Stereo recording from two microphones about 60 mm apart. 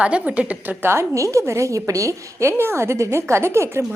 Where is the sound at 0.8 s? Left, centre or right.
Right.